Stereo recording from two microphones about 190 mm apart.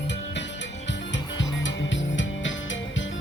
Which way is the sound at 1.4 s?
75° left (ahead or behind).